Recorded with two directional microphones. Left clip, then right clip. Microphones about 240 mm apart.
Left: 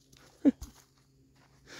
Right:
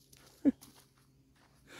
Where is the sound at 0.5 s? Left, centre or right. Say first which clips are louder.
Left 4 dB; left.